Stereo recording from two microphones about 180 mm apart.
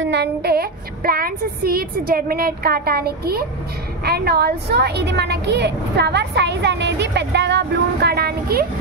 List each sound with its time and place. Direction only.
0.0 s child singing: 70° right (ahead or behind)
4.0 s a woman's voice: 60° right (ahead or behind)